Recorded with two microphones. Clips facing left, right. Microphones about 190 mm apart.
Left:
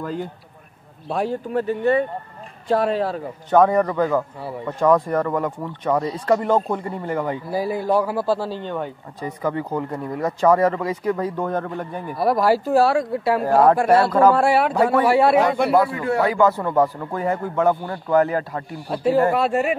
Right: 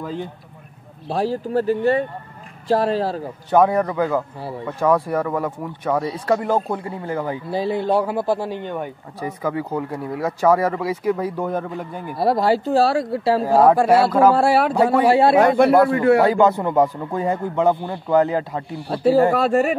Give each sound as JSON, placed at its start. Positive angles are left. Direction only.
{"t": 1.0, "sound": "speech", "side_deg": -35}
{"t": 3.4, "sound": "speech", "side_deg": -10}
{"t": 7.5, "sound": "speech", "side_deg": -25}
{"t": 12.2, "sound": "speech", "side_deg": -30}
{"t": 13.5, "sound": "speech", "side_deg": -5}
{"t": 14.3, "sound": "speech", "side_deg": -35}
{"t": 15.4, "sound": "speech", "side_deg": -55}
{"t": 16.2, "sound": "speech", "side_deg": -25}
{"t": 18.9, "sound": "speech", "side_deg": -35}